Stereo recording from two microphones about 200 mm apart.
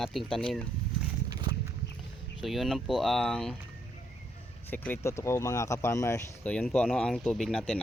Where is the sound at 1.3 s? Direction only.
20° right (ahead or behind).